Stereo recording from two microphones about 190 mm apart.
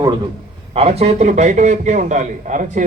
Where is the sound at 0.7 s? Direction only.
30° right (ahead or behind).